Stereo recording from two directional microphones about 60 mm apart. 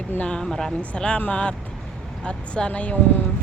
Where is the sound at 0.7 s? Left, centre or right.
Centre.